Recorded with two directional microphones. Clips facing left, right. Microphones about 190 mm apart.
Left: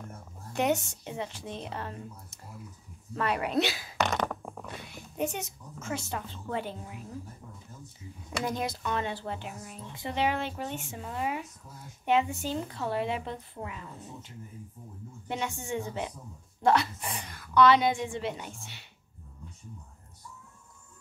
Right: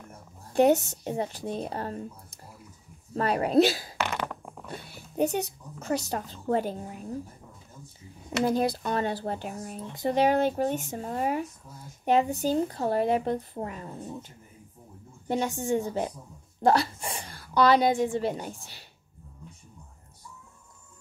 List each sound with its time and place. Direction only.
0.5 s speech: 35° right (ahead or behind)
8.5 s speech: 35° right (ahead or behind)